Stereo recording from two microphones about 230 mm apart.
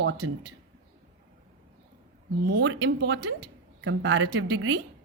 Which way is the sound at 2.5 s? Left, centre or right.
Right.